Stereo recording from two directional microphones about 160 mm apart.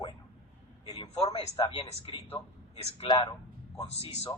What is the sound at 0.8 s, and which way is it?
A man's voice, 25° left (ahead or behind).